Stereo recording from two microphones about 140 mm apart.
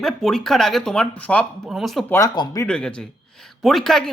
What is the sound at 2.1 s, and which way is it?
Speech, 25° left (ahead or behind).